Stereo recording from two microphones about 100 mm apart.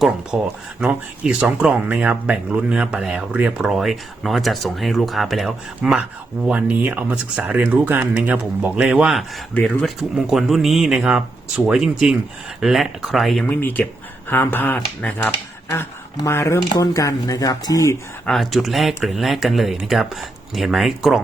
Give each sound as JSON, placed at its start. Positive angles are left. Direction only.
{"t": 0.3, "sound": "speech", "side_deg": -15}
{"t": 6.5, "sound": "speech", "side_deg": -15}
{"t": 13.5, "sound": "speech", "side_deg": 20}
{"t": 18.3, "sound": "speech", "side_deg": 0}